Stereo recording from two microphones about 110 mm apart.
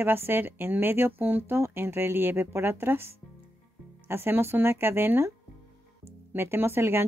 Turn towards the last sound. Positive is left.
turn(degrees=-20)  # may be behind; listen again after turning